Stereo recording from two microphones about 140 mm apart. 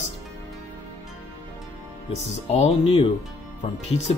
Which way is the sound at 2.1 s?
50° left (ahead or behind).